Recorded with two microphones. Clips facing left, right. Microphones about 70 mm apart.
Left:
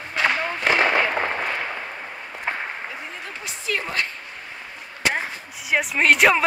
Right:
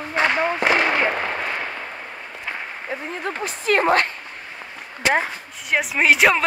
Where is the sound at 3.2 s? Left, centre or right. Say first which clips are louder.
Right 9 dB; right.